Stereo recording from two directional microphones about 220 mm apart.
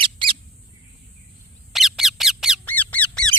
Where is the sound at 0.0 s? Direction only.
25° right (ahead or behind).